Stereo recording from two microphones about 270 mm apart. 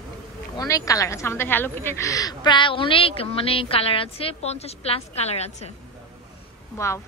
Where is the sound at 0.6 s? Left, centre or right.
Centre.